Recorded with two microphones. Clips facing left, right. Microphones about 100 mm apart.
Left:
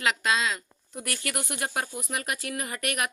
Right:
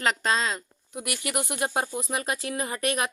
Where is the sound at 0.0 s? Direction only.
40° right (ahead or behind).